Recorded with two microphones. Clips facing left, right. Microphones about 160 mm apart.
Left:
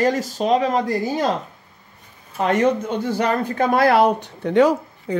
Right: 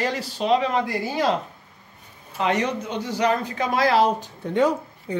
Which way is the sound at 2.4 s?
50° left (ahead or behind).